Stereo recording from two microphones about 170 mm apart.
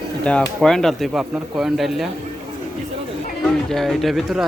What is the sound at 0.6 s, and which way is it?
Speech, 5° left (ahead or behind).